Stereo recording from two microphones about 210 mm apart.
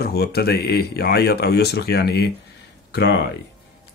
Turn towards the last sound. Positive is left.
turn(degrees=55)  # may be behind; listen again after turning